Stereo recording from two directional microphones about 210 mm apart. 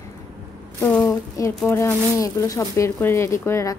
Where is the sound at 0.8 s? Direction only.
10° left (ahead or behind).